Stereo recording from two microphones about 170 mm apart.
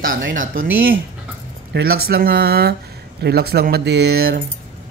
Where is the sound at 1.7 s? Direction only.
70° right (ahead or behind).